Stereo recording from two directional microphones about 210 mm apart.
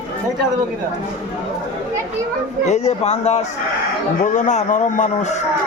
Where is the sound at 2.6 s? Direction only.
30° left (ahead or behind).